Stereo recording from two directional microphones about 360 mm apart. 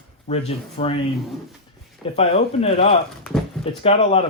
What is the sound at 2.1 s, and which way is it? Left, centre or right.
Speech, centre.